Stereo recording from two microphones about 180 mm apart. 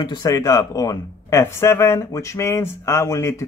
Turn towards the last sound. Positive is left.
turn(degrees=15)  # may be behind; listen again after turning